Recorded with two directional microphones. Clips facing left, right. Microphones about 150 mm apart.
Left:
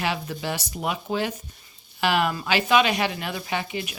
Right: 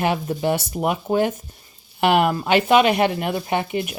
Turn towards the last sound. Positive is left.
turn(degrees=-55)  # may be behind; listen again after turning